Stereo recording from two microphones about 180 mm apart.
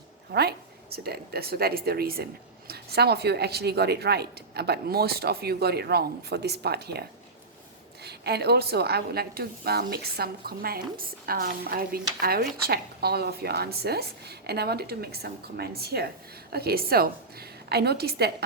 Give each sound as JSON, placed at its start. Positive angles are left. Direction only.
{"t": 0.3, "sound": "speech", "side_deg": -60}
{"t": 8.0, "sound": "speech", "side_deg": -65}